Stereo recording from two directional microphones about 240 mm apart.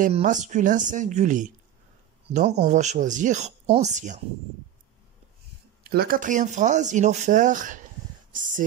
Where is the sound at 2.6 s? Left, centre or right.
Right.